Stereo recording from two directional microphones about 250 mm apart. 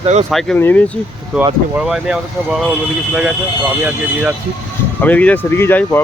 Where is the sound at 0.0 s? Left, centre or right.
Right.